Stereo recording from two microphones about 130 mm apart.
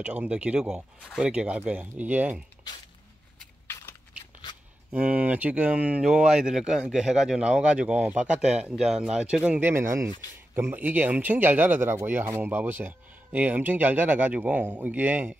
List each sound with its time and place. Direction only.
0.0 s speech: 10° right (ahead or behind)
3.6 s a sound: 20° left (ahead or behind)
4.9 s speech: 10° right (ahead or behind)